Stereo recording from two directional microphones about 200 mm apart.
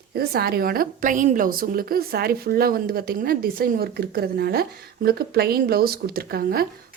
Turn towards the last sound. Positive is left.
turn(degrees=-50)  # may be behind; listen again after turning